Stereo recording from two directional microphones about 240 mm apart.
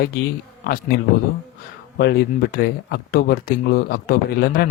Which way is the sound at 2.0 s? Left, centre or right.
Left.